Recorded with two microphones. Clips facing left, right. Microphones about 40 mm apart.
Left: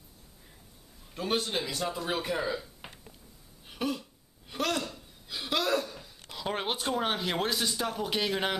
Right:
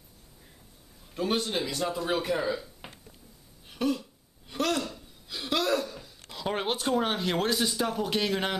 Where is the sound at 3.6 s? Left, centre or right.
Centre.